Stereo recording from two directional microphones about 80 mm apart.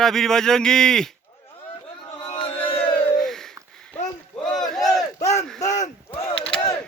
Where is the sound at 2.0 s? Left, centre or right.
Left.